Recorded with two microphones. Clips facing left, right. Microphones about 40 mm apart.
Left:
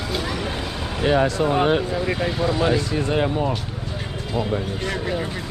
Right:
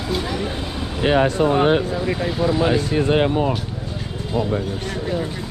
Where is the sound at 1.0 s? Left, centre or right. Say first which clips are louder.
Right 2 dB; right.